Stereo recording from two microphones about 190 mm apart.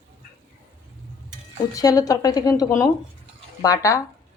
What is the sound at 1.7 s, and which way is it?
A woman's voice, 20° left (ahead or behind).